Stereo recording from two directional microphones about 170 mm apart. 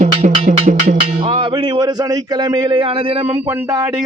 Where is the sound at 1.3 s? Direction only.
30° right (ahead or behind).